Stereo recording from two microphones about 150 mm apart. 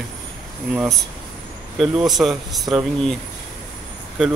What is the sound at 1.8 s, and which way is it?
Speech, centre (ahead or behind).